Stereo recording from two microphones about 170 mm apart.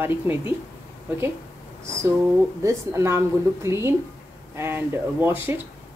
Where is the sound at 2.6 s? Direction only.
15° right (ahead or behind).